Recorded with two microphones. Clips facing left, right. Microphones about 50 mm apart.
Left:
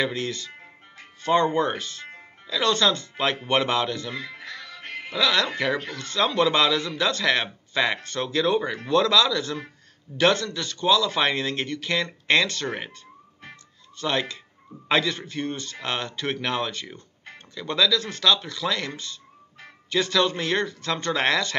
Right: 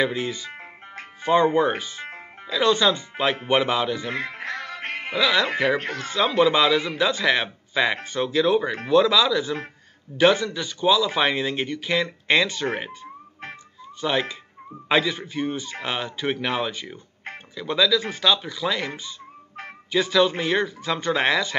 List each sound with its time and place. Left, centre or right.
0.0 s speech: centre
0.5 s music: right
1.3 s speech: centre
4.1 s music: right
5.1 s speech: centre
19.9 s speech: centre